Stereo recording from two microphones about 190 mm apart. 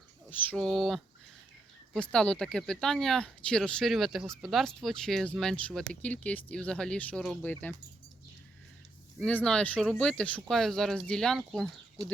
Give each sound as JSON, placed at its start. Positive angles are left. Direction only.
{"t": 0.3, "sound": "speech", "side_deg": 5}
{"t": 9.2, "sound": "speech", "side_deg": 5}
{"t": 12.0, "sound": "speech", "side_deg": -20}